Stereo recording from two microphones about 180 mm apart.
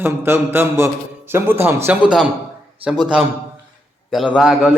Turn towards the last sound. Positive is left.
turn(degrees=-5)  # may be behind; listen again after turning